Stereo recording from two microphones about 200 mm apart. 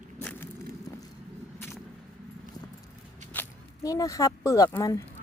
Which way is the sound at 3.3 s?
15° left (ahead or behind).